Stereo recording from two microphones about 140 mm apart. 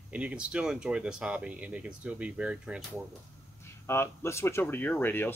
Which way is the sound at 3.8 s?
20° left (ahead or behind).